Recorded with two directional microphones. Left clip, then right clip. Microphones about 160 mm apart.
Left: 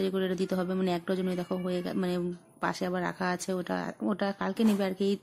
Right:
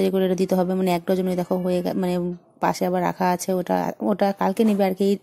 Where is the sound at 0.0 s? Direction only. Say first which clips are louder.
Right 9 dB; 30° right (ahead or behind).